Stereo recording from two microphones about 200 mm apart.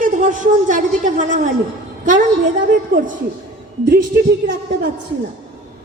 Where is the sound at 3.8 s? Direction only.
50° right (ahead or behind).